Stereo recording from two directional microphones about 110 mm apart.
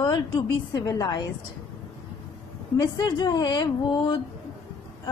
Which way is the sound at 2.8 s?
45° left (ahead or behind).